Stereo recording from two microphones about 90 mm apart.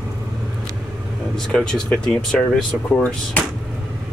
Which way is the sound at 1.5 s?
5° left (ahead or behind).